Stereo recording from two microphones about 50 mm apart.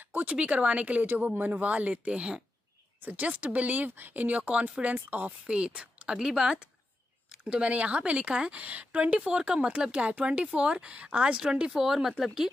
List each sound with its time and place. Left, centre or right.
0.0 s a sound: right
0.3 s speech: right
3.0 s speech: right
5.5 s speech: centre
11.7 s speech: centre